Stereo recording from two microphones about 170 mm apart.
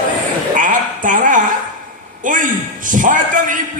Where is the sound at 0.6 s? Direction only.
50° right (ahead or behind).